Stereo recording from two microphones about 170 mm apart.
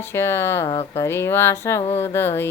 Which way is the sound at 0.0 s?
15° left (ahead or behind).